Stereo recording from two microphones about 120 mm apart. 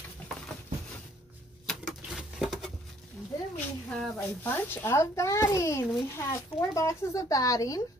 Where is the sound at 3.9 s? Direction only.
5° left (ahead or behind).